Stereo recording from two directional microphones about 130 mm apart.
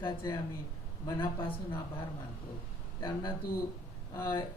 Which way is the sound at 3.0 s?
35° left (ahead or behind).